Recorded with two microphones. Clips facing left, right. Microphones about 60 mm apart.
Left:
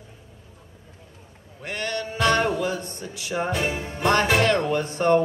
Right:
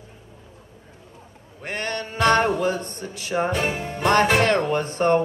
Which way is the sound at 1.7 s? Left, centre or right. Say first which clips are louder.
Even; right.